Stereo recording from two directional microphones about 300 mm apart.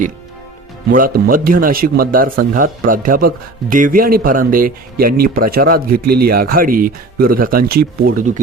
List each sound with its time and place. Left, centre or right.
0.9 s speech: right